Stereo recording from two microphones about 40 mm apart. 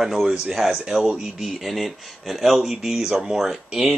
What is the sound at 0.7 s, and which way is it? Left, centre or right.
Speech, centre.